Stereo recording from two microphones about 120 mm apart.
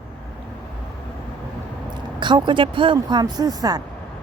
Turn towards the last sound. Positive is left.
turn(degrees=-30)  # may be behind; listen again after turning